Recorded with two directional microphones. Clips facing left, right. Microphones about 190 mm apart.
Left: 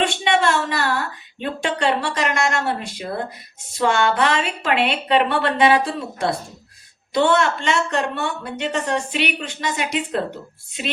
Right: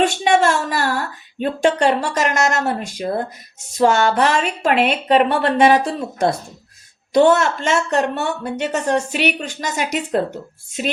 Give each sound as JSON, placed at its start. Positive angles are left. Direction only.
{"t": 0.3, "sound": "a woman's voice", "side_deg": -45}